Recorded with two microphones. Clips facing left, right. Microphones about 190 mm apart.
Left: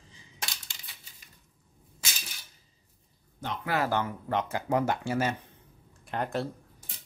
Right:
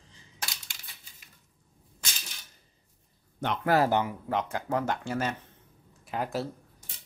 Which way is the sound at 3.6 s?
40° right (ahead or behind).